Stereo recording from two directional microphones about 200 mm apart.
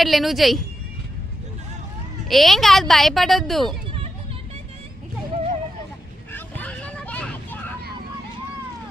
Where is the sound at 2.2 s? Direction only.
Centre (ahead or behind).